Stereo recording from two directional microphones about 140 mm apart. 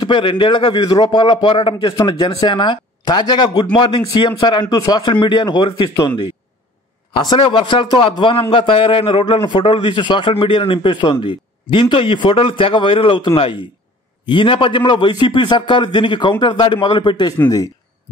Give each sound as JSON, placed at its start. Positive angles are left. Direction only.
{"t": 0.0, "sound": "a man's voice", "side_deg": 35}